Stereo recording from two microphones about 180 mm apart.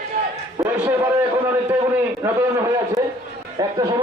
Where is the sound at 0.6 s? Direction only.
15° right (ahead or behind).